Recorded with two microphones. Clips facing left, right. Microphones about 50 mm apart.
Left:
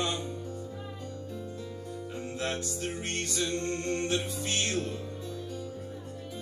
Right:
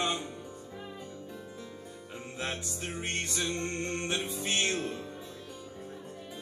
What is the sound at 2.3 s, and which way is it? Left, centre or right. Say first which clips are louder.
Music: left 2 dB; centre.